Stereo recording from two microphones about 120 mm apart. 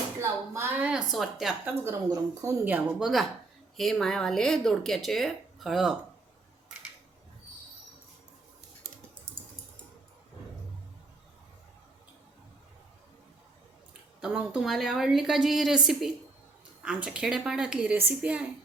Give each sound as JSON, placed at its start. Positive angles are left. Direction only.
{"t": 0.2, "sound": "a sound", "side_deg": -20}
{"t": 0.8, "sound": "speech", "side_deg": -10}
{"t": 1.6, "sound": "speech", "side_deg": -20}
{"t": 2.6, "sound": "a woman's voice", "side_deg": -15}
{"t": 3.0, "sound": "speech", "side_deg": 0}
{"t": 14.2, "sound": "a woman's voice", "side_deg": -5}